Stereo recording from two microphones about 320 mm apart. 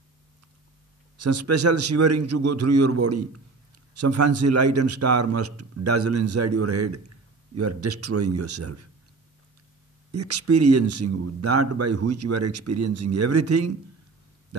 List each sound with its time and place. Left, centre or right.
1.2 s speech: right
10.1 s speech: right